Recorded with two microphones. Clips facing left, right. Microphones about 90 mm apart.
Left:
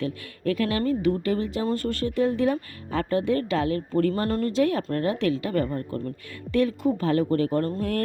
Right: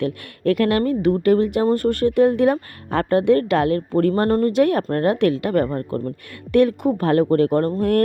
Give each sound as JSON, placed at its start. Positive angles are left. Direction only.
{"t": 0.0, "sound": "speech", "side_deg": -65}
{"t": 4.5, "sound": "speech", "side_deg": -60}
{"t": 6.5, "sound": "speech", "side_deg": -60}